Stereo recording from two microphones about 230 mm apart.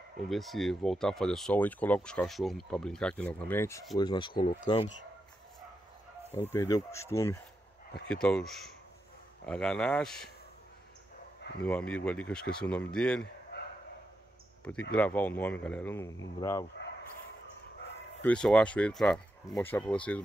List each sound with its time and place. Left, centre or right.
0.3 s speech: centre
6.3 s speech: centre
11.6 s speech: centre
14.6 s speech: centre
18.2 s speech: centre